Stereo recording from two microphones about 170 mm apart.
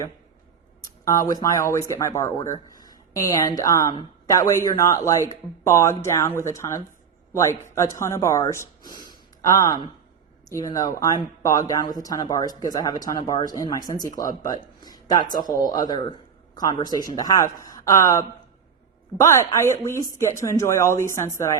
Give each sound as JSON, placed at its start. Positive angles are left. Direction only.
{"t": 1.0, "sound": "speech", "side_deg": 20}
{"t": 14.4, "sound": "a sound", "side_deg": 25}
{"t": 15.6, "sound": "speech", "side_deg": 25}